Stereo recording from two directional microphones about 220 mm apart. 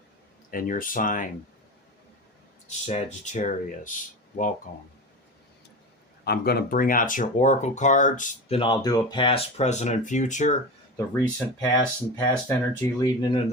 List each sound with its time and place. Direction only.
0.5 s speech: 40° left (ahead or behind)
2.6 s speech: 30° left (ahead or behind)
6.2 s speech: 45° left (ahead or behind)
10.9 s speech: 15° left (ahead or behind)